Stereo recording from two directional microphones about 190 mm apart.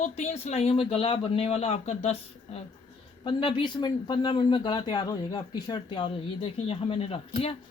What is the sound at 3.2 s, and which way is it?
Speech, 25° left (ahead or behind).